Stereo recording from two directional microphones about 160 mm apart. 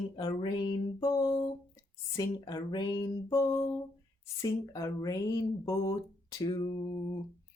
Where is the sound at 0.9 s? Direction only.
25° left (ahead or behind).